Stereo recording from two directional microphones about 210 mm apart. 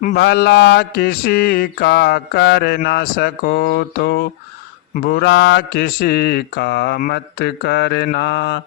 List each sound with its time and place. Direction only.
0.0 s mantra: 50° left (ahead or behind)